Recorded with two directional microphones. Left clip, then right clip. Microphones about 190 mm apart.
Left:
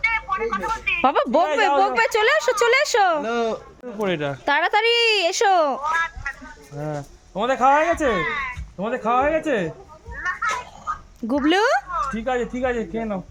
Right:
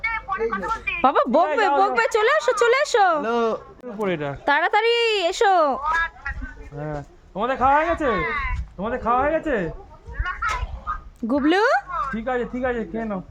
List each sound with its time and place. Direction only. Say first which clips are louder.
0.0 s a sound: left 2 dB; 25° left (ahead or behind)
1.0 s speech: right 1 dB; 5° right (ahead or behind)
3.2 s speech: right 1 dB; 25° right (ahead or behind)
4.0 s speech: left 1 dB; 40° left (ahead or behind)
4.4 s speech: even; 10° right (ahead or behind)
5.8 s a sound: even; 40° left (ahead or behind)
6.7 s speech: left 2 dB; 45° left (ahead or behind)
11.3 s speech: even; 5° right (ahead or behind)
11.9 s speech: left 1 dB; 40° left (ahead or behind)